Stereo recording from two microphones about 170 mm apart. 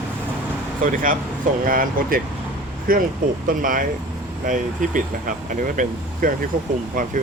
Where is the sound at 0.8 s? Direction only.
55° right (ahead or behind).